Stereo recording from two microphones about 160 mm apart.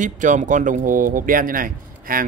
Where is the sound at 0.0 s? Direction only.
50° right (ahead or behind).